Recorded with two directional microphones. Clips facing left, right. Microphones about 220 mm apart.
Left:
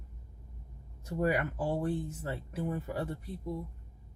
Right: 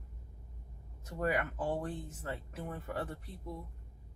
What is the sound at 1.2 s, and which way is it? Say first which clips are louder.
Speech: left 3 dB; 10° left (ahead or behind).